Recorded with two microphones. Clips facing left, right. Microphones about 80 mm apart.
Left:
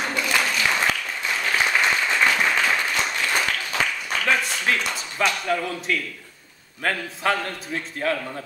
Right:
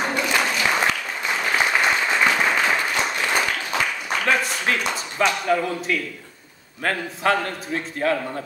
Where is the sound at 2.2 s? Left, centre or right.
Centre.